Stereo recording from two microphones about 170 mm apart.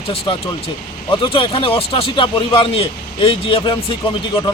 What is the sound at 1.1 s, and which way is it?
Speech, 30° left (ahead or behind).